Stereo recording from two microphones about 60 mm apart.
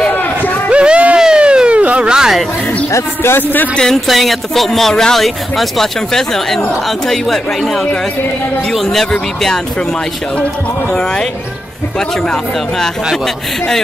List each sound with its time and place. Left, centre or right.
0.1 s run: left
0.7 s a sound: centre
3.9 s speech: centre
10.9 s speech: centre
12.3 s speech: centre